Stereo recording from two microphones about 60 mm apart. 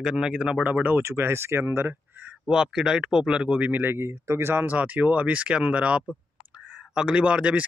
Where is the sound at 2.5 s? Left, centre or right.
Centre.